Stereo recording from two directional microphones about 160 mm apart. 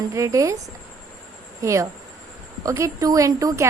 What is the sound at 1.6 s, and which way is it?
A woman's voice, 20° right (ahead or behind).